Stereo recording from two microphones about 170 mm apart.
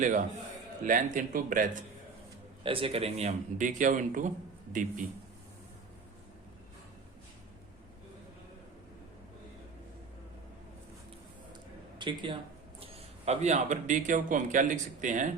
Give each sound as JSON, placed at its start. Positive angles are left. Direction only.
{"t": 0.9, "sound": "a man's voice", "side_deg": -55}
{"t": 2.6, "sound": "a man's voice", "side_deg": -30}
{"t": 11.9, "sound": "speech", "side_deg": -30}
{"t": 13.2, "sound": "a man's voice", "side_deg": -40}